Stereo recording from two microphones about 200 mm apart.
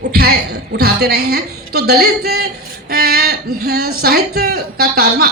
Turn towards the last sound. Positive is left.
turn(degrees=-50)  # may be behind; listen again after turning